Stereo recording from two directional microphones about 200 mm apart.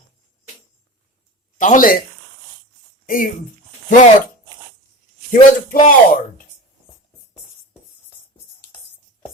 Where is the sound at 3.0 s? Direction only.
45° left (ahead or behind).